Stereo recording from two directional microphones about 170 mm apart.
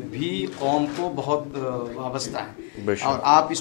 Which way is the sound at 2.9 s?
10° left (ahead or behind).